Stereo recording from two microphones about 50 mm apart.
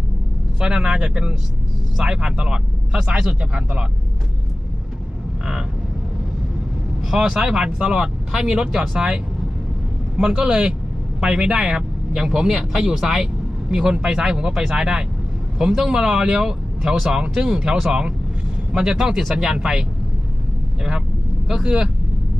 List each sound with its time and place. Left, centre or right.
0.6 s speech: centre
7.1 s speech: centre
21.5 s speech: centre